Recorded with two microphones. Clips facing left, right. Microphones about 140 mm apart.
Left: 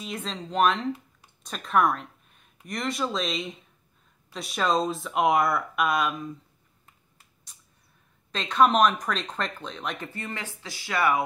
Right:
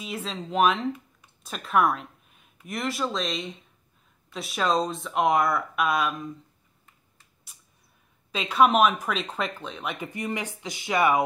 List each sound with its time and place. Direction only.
0.0 s speech: centre (ahead or behind)
7.5 s a sound: 5° right (ahead or behind)
8.3 s speech: 10° right (ahead or behind)
10.0 s speech: 15° right (ahead or behind)